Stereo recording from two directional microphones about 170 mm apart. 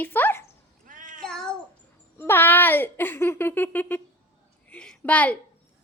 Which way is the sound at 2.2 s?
10° left (ahead or behind).